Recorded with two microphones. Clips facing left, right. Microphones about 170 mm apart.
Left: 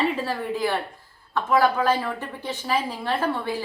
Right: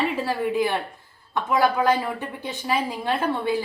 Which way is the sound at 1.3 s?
15° right (ahead or behind).